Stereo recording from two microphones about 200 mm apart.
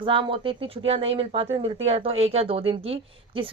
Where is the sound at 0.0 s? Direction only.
25° right (ahead or behind).